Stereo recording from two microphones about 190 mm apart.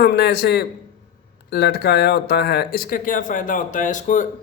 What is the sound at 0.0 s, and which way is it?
A man's voice, 60° left (ahead or behind).